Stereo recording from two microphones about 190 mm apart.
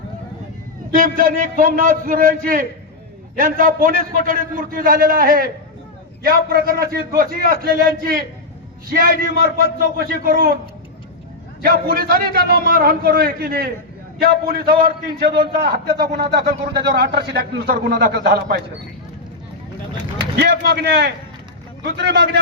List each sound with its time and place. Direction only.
0.9 s a man's voice: 50° right (ahead or behind)
11.6 s a man's voice: 50° right (ahead or behind)
20.3 s speech: 60° right (ahead or behind)